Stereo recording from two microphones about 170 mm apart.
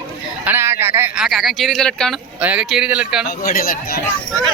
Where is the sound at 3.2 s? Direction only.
60° left (ahead or behind).